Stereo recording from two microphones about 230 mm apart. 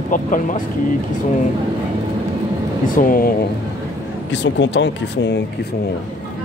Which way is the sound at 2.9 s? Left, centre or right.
Left.